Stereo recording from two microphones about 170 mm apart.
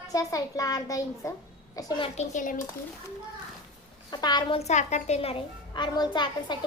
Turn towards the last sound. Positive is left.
turn(degrees=25)  # may be behind; listen again after turning